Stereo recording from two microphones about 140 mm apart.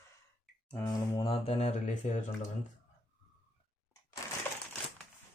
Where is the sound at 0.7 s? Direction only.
30° left (ahead or behind); by 2.2 s 55° left (ahead or behind).